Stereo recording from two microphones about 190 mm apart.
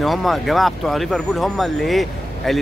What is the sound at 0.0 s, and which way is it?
Speech, centre (ahead or behind).